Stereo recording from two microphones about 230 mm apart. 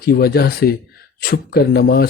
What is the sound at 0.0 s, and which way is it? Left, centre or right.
Speech, left.